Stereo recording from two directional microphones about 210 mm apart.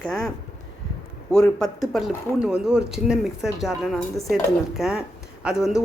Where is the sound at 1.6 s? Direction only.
Centre (ahead or behind).